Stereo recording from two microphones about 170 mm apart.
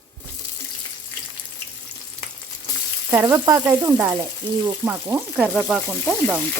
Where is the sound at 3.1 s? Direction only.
15° right (ahead or behind).